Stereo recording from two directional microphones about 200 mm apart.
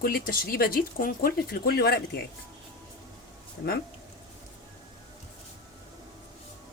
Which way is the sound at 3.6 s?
55° left (ahead or behind).